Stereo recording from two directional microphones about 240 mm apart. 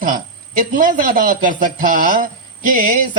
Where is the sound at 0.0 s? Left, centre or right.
Right.